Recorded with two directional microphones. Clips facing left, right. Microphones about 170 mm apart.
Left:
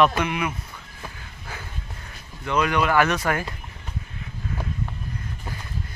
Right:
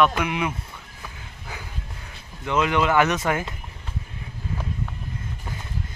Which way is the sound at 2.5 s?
20° right (ahead or behind).